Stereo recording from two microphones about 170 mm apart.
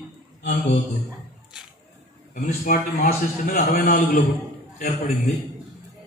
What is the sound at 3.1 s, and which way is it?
Speech, 45° left (ahead or behind).